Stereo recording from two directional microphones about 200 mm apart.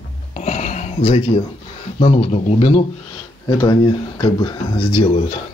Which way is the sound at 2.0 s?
30° left (ahead or behind).